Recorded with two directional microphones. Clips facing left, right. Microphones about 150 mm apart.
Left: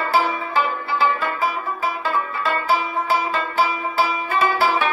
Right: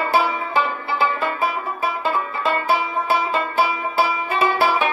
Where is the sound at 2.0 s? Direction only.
20° right (ahead or behind).